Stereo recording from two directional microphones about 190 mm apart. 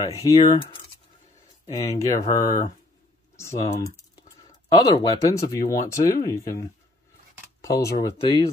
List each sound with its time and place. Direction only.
0.0 s speech: 25° left (ahead or behind)
1.9 s speech: 15° left (ahead or behind)
2.2 s speech: 45° left (ahead or behind)
3.3 s speech: 15° left (ahead or behind)
7.6 s speech: 15° left (ahead or behind)